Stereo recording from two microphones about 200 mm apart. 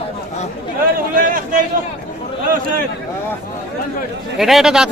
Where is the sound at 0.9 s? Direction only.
45° right (ahead or behind).